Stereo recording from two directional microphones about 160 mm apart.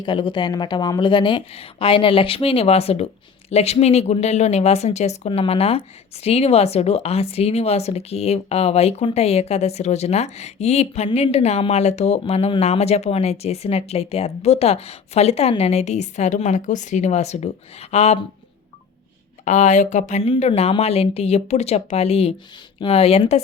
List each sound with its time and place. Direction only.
0.0 s speech: 30° left (ahead or behind)
19.5 s speech: 45° left (ahead or behind)